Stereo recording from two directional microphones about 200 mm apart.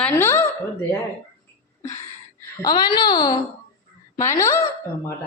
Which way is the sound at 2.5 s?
20° left (ahead or behind).